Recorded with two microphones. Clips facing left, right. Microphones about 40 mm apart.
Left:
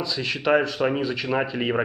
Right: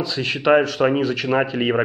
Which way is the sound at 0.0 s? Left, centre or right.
Right.